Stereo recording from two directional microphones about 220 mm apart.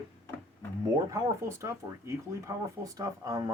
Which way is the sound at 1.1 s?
15° right (ahead or behind).